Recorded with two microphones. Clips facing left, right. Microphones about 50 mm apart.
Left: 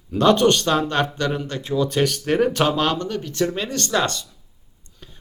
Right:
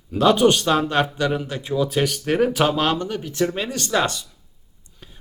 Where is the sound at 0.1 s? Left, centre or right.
Centre.